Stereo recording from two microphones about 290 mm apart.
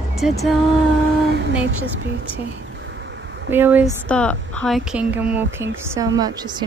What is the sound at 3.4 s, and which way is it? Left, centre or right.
Speech, centre.